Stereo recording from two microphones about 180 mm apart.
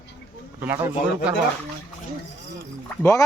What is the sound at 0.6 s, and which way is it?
Speech, 10° right (ahead or behind).